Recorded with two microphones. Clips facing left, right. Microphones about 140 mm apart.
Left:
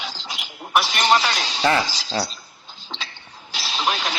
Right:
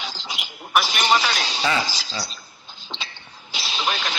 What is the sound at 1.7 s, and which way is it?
Speech, 55° left (ahead or behind).